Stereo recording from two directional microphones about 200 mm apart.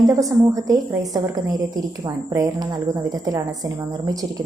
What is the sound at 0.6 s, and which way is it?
A woman's voice, 15° right (ahead or behind).